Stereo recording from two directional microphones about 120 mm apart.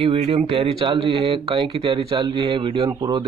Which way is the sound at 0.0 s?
50° right (ahead or behind).